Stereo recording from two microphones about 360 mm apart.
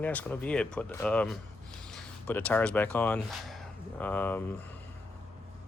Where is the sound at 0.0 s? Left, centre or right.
Centre.